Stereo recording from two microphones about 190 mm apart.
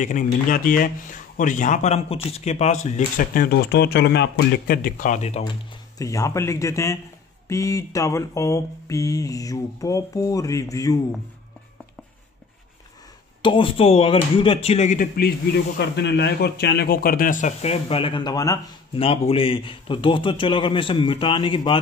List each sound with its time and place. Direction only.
0.0 s speech: 45° left (ahead or behind)
5.9 s mantra: 15° left (ahead or behind)
13.4 s a man's voice: 25° left (ahead or behind)
15.0 s speech: 50° left (ahead or behind); by 18.6 s 20° left (ahead or behind)
18.9 s a man's voice: 30° left (ahead or behind)